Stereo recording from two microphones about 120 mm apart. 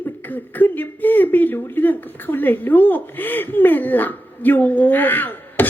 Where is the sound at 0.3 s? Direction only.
15° left (ahead or behind).